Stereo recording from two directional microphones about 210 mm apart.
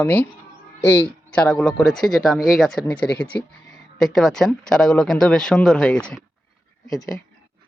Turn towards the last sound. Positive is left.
turn(degrees=0)  # may be behind; listen again after turning